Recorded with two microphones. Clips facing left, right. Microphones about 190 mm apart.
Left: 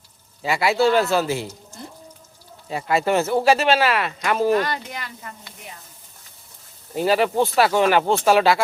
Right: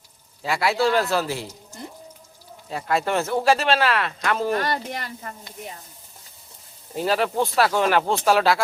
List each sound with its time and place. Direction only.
0.4 s speech: centre (ahead or behind)
2.6 s speech: 5° left (ahead or behind)
4.7 s speech: 40° right (ahead or behind)
7.0 s speech: centre (ahead or behind)